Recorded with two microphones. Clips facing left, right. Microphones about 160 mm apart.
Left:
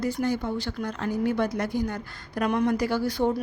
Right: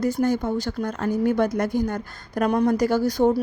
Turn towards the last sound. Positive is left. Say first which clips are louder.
# right 5 dB
turn(degrees=-40)  # may be behind; listen again after turning